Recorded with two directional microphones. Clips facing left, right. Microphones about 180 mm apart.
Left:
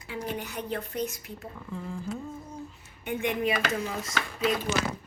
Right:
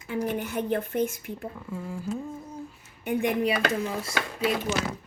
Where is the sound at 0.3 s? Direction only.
55° right (ahead or behind).